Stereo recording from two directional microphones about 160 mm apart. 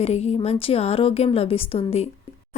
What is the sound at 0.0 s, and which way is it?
Speech, 45° left (ahead or behind).